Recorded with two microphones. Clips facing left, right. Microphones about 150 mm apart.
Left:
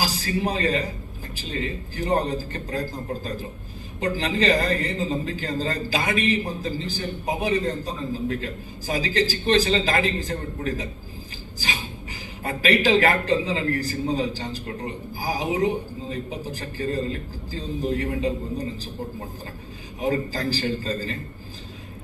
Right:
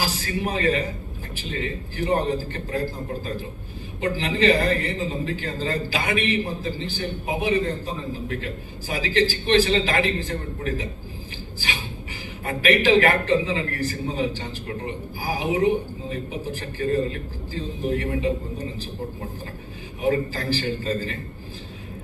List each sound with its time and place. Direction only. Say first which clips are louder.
0.0 s a man's voice: left 1 dB; 35° left (ahead or behind)
4.0 s a man's voice: right 2 dB; 40° left (ahead or behind)
12.5 s a man's voice: right 1 dB; 35° left (ahead or behind)
20.0 s a man's voice: right 2 dB; 35° left (ahead or behind)